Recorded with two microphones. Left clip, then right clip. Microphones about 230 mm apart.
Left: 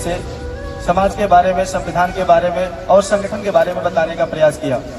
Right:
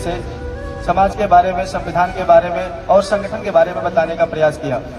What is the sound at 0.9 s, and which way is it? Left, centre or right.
A man's voice, left.